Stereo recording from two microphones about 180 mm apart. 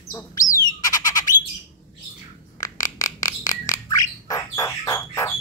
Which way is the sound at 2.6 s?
20° left (ahead or behind).